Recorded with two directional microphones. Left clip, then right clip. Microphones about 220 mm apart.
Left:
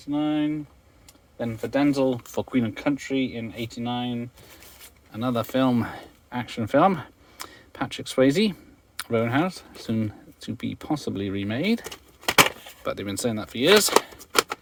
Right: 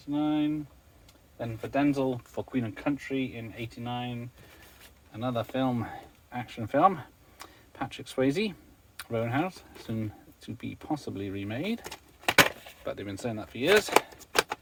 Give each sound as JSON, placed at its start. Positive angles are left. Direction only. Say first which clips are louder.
{"t": 0.1, "sound": "speech", "louder": "left 3 dB", "side_deg": 50}
{"t": 11.8, "sound": "keys jangling", "louder": "left 4 dB", "side_deg": 10}
{"t": 12.8, "sound": "speech", "louder": "left 7 dB", "side_deg": 50}